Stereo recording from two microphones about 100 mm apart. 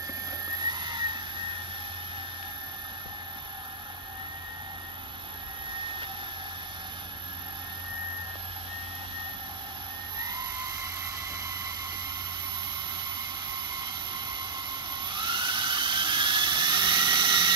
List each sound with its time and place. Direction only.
0.5 s helicopter: 45° right (ahead or behind)
10.1 s emergency vehicle: 45° right (ahead or behind)
15.0 s dental drill: 50° right (ahead or behind)